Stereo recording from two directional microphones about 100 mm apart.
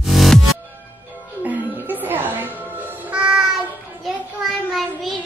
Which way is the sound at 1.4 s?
20° right (ahead or behind).